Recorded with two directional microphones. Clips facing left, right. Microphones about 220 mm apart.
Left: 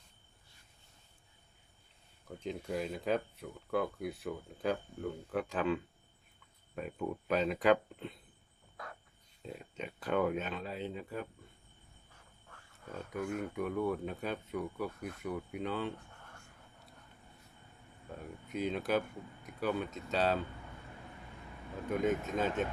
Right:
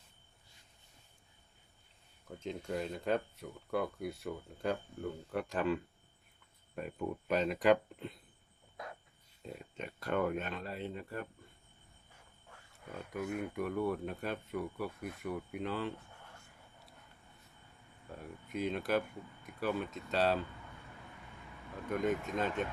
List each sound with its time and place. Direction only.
2.2 s speech: centre (ahead or behind)
8.8 s cricket: 20° right (ahead or behind)
9.4 s speech: centre (ahead or behind)
12.5 s speech: 10° right (ahead or behind)
18.4 s speech: centre (ahead or behind)
21.8 s speech: centre (ahead or behind)